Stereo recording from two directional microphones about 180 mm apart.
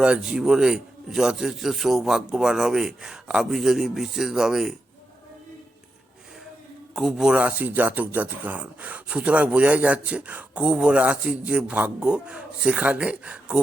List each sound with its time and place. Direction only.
0.0 s a man's voice: 5° right (ahead or behind)
6.9 s speech: 5° right (ahead or behind)